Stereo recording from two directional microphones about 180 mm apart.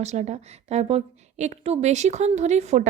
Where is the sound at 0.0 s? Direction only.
40° right (ahead or behind).